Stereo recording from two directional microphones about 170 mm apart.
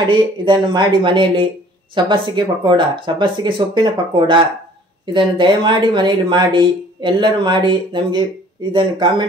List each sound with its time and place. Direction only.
0.0 s speech: 30° right (ahead or behind)